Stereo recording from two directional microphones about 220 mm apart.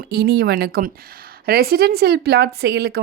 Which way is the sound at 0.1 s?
45° right (ahead or behind).